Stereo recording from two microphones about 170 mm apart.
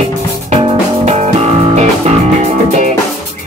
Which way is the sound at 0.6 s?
35° right (ahead or behind).